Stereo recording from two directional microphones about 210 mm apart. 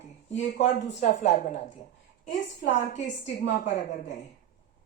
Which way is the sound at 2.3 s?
55° left (ahead or behind).